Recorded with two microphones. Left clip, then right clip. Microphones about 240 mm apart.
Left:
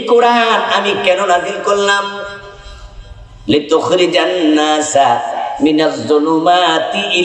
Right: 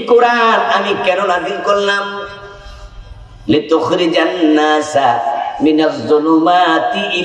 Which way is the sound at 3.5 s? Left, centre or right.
Left.